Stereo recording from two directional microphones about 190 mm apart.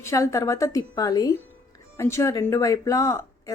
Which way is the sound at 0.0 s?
15° left (ahead or behind).